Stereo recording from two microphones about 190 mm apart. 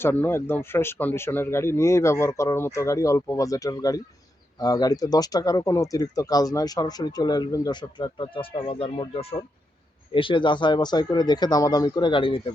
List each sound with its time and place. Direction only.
0.0 s speech: 10° left (ahead or behind)